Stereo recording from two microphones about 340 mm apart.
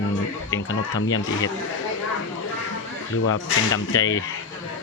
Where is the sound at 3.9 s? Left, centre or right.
Left.